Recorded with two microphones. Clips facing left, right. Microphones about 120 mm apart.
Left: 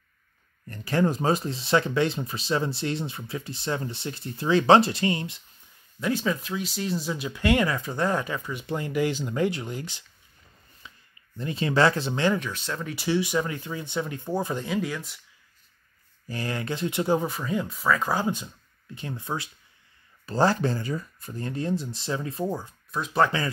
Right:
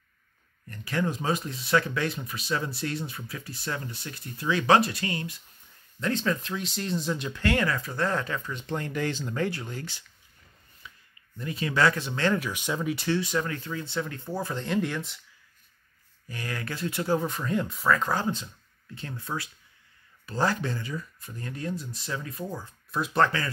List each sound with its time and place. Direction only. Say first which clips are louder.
0.7 s speech: left 5 dB; 35° left (ahead or behind)
5.9 s speech: left 1 dB; 10° left (ahead or behind)
10.8 s a sound: even; 25° left (ahead or behind)
11.3 s speech: left 4 dB; 30° left (ahead or behind)
12.4 s speech: right 2 dB; 10° right (ahead or behind)
12.9 s speech: left 5 dB; 10° left (ahead or behind)
14.7 s speech: right 1 dB; centre (ahead or behind)
16.3 s speech: left 5 dB; 30° left (ahead or behind)
17.3 s speech: even; centre (ahead or behind); by 19.5 s 20° left (ahead or behind)
20.2 s speech: left 5 dB; 35° left (ahead or behind)
22.8 s speech: left 1 dB; centre (ahead or behind)
23.2 s speech: left 4 dB; 20° left (ahead or behind)